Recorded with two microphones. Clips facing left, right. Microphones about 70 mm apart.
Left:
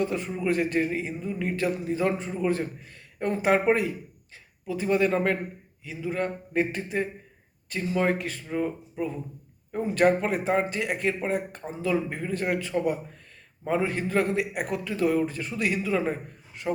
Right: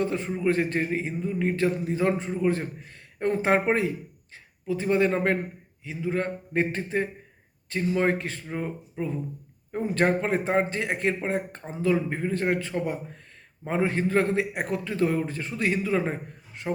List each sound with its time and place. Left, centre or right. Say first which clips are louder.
0.0 s a man's voice: right 2 dB; right